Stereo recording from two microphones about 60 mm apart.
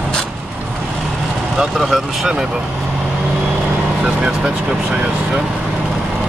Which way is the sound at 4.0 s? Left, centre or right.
Centre.